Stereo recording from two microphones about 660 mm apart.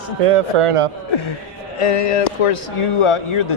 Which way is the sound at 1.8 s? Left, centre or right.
Left.